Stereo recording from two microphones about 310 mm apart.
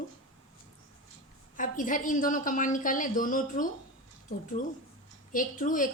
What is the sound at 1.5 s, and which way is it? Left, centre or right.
A woman's voice, left.